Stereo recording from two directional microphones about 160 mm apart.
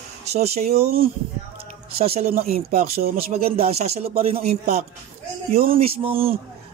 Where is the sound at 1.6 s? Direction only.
35° right (ahead or behind).